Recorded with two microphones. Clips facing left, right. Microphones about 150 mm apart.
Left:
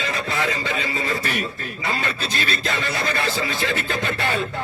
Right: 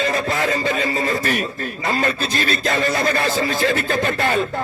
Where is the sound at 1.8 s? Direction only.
45° right (ahead or behind).